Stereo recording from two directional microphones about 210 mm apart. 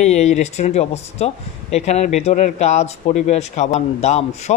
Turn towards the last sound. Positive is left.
turn(degrees=30)  # may be behind; listen again after turning